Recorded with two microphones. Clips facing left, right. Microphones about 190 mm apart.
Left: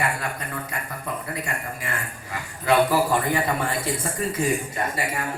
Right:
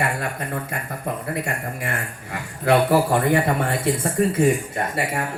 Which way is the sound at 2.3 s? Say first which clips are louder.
Right 2 dB; 60° right (ahead or behind).